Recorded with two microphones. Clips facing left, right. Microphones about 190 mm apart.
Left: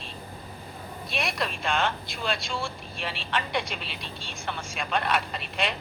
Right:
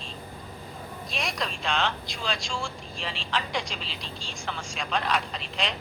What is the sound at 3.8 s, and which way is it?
Speech, 60° left (ahead or behind).